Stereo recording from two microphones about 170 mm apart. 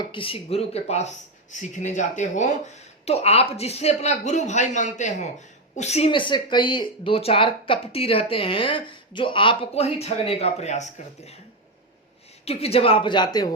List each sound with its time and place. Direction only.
0.0 s speech: 30° left (ahead or behind)
6.1 s speech: 30° left (ahead or behind)
12.5 s speech: 35° left (ahead or behind)